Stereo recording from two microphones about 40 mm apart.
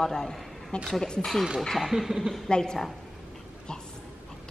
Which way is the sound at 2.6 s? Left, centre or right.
Centre.